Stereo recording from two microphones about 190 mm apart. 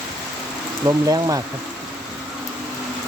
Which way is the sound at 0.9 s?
15° right (ahead or behind).